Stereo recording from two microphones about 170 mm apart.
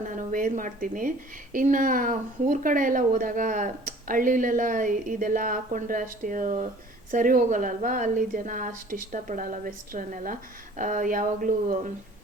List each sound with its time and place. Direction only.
0.0 s speech: 50° right (ahead or behind)